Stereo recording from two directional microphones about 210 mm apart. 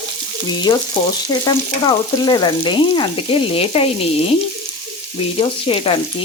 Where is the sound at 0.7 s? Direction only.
20° left (ahead or behind).